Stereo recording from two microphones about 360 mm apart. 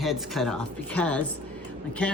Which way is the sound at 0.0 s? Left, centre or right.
Centre.